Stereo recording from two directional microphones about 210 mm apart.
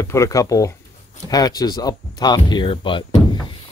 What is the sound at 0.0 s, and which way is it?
Speech, 15° left (ahead or behind).